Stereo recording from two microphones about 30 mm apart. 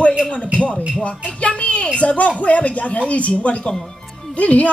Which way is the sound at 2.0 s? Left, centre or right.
Left.